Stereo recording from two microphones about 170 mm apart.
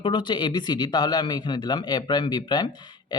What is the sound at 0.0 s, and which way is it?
Speech, 25° left (ahead or behind).